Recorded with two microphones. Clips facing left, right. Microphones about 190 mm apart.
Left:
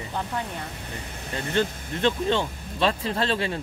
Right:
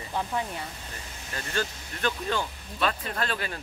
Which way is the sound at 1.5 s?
25° left (ahead or behind).